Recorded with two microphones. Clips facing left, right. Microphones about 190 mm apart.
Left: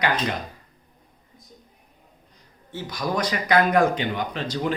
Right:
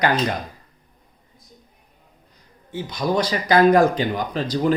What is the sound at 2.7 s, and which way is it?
Speech, 25° right (ahead or behind).